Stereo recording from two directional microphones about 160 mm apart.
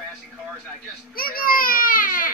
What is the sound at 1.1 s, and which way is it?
Baby cry, 65° left (ahead or behind).